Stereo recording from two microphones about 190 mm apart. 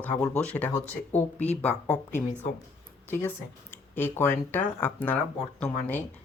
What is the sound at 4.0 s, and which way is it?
Speech, 10° left (ahead or behind).